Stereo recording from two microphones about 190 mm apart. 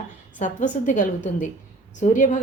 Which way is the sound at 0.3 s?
40° left (ahead or behind).